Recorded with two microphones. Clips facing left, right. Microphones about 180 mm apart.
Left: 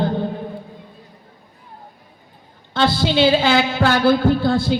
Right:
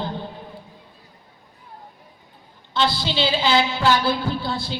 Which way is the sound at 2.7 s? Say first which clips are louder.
Left 6 dB; 50° left (ahead or behind).